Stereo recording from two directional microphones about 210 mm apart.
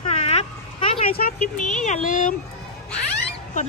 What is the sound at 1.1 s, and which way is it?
Speech, 45° left (ahead or behind).